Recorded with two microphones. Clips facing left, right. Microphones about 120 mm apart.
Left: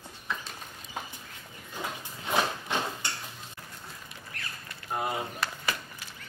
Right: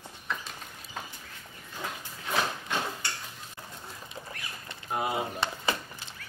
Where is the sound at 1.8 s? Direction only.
20° left (ahead or behind).